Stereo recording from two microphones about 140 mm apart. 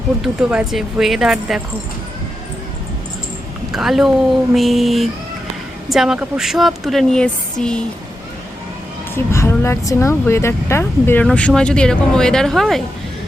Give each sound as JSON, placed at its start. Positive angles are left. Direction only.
{"t": 0.2, "sound": "speech", "side_deg": 0}
{"t": 3.7, "sound": "speech", "side_deg": 0}
{"t": 9.1, "sound": "speech", "side_deg": 20}